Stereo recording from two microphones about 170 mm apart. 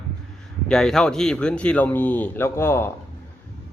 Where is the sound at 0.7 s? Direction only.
5° left (ahead or behind).